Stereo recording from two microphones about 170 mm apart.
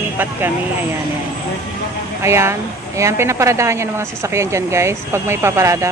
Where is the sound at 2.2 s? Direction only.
15° right (ahead or behind).